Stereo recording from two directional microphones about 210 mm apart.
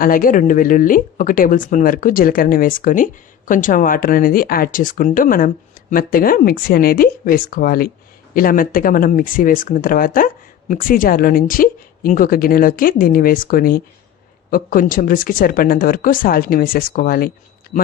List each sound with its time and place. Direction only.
0.0 s speech: 40° left (ahead or behind)